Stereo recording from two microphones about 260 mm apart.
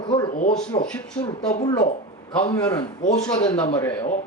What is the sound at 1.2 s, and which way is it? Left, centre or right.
Speech, centre.